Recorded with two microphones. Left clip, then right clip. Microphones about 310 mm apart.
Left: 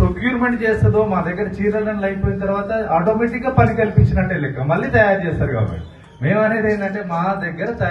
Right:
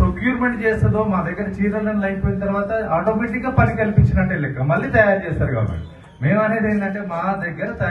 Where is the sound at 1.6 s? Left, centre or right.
Left.